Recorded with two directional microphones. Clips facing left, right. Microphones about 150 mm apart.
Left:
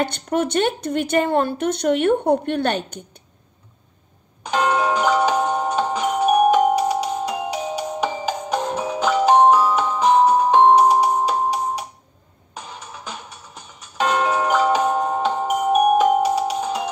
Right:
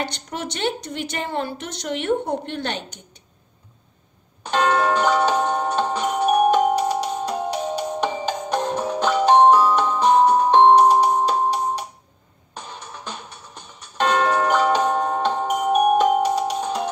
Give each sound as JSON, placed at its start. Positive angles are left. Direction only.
{"t": 0.0, "sound": "a woman's voice", "side_deg": 50}
{"t": 4.4, "sound": "music", "side_deg": 10}